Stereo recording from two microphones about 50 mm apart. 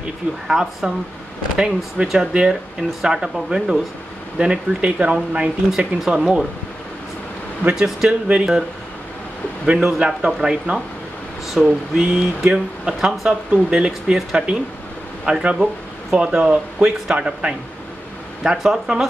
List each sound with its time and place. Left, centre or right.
0.5 s speech: centre; by 5.5 s right
5.7 s speech: centre
7.7 s speech: centre
9.8 s speech: centre